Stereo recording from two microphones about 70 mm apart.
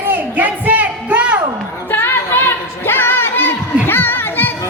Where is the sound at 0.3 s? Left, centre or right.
Right.